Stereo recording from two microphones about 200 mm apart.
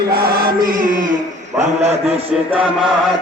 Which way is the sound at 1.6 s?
35° right (ahead or behind).